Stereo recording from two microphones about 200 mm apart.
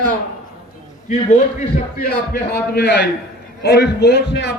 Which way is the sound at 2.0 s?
50° left (ahead or behind).